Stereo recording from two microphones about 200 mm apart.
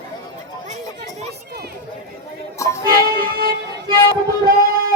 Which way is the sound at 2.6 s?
15° left (ahead or behind).